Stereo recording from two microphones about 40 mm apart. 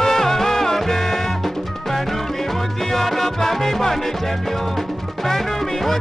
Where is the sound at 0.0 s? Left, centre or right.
Centre.